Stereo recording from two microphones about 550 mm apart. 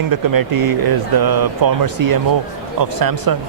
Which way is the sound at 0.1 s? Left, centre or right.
Right.